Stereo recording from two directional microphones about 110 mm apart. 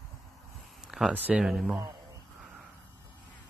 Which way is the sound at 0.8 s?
5° right (ahead or behind).